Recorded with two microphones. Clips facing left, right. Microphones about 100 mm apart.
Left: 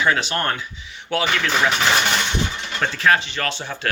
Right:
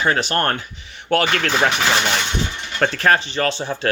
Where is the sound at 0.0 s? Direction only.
45° right (ahead or behind).